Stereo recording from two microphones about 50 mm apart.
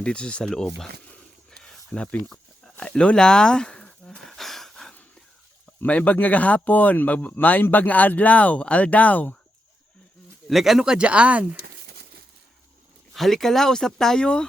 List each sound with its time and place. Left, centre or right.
0.0 s speech: centre
0.5 s speech: centre
1.5 s a sound: centre
2.8 s speech: centre
4.2 s a sound: centre
5.8 s speech: left
10.5 s speech: centre
10.9 s speech: right
13.1 s speech: centre